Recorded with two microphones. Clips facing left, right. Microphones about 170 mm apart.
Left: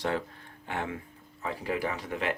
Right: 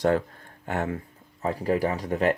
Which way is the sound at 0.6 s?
45° right (ahead or behind).